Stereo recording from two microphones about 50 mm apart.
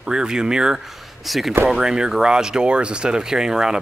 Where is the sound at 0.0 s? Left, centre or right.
Centre.